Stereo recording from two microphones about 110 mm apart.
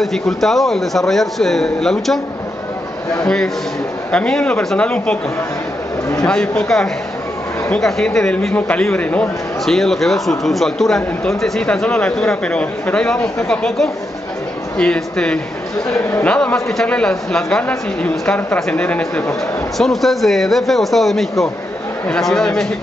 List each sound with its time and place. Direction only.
0.0 s a man's voice: centre (ahead or behind)
4.1 s speech: 10° left (ahead or behind)
6.2 s a man's voice: 5° left (ahead or behind)
16.3 s a man's voice: 5° left (ahead or behind)